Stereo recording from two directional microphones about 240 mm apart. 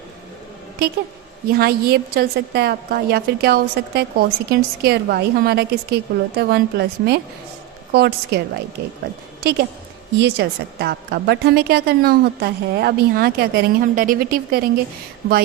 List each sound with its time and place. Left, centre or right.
1.5 s a woman's voice: right
10.2 s a woman's voice: right